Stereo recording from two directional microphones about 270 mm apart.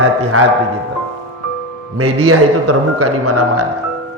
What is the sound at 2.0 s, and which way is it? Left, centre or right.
A man's voice, right.